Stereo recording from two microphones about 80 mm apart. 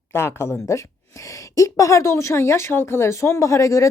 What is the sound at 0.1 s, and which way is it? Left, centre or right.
A woman's voice, left.